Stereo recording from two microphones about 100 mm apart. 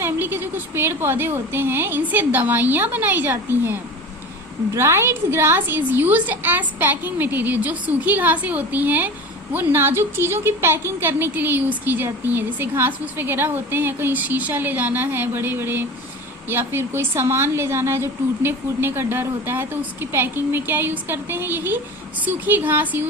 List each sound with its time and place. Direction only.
0.0 s a woman's voice: 20° right (ahead or behind)